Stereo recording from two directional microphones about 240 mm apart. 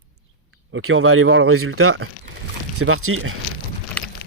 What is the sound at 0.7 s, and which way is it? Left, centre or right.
Speech, right.